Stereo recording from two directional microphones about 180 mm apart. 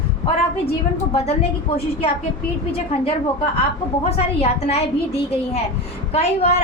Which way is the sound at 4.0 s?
35° left (ahead or behind).